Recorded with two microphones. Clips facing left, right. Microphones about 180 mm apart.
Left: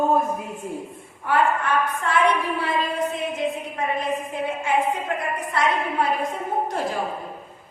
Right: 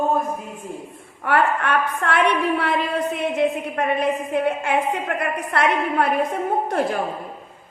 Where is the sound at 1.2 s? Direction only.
65° right (ahead or behind).